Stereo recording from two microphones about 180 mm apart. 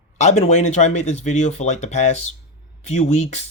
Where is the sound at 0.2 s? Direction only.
40° left (ahead or behind).